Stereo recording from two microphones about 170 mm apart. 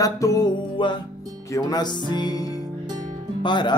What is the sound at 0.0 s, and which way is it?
Music, 20° left (ahead or behind).